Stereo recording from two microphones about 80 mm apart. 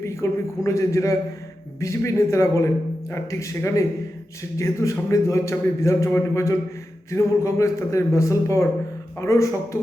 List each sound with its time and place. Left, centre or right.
0.0 s a man's voice: left